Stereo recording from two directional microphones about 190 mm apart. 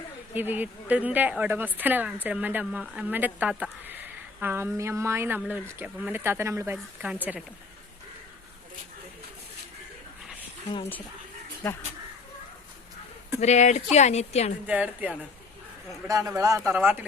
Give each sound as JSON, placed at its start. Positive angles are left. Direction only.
{"t": 0.3, "sound": "speech", "side_deg": -10}
{"t": 13.4, "sound": "a woman's voice", "side_deg": 35}
{"t": 14.7, "sound": "speech", "side_deg": -5}